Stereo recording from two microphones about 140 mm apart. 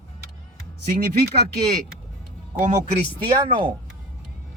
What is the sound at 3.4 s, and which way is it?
Speech, 35° right (ahead or behind).